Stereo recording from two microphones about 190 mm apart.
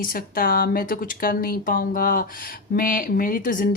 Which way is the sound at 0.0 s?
50° left (ahead or behind).